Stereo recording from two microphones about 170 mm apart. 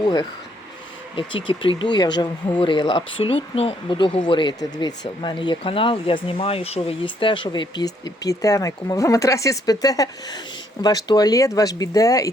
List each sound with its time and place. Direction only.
0.0 s speech: 25° left (ahead or behind)
1.5 s speech: 35° left (ahead or behind)